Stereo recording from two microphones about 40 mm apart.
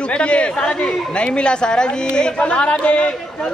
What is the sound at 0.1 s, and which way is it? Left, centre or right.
Speech, left.